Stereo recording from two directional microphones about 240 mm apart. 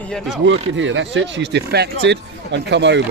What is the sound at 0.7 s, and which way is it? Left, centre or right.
Speech, right.